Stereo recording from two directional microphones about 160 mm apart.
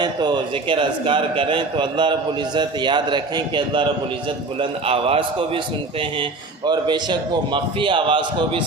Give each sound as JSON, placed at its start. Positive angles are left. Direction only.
{"t": 0.0, "sound": "a man's voice", "side_deg": -30}
{"t": 4.9, "sound": "a man's voice", "side_deg": -35}
{"t": 6.7, "sound": "a man's voice", "side_deg": -25}